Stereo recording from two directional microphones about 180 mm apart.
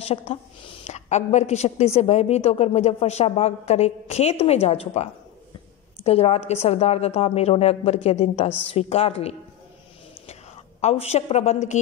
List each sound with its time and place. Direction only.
0.0 s a woman's voice: 35° left (ahead or behind)
10.8 s a woman's voice: 35° left (ahead or behind)